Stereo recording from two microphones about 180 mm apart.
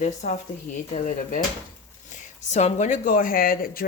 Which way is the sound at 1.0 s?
50° left (ahead or behind).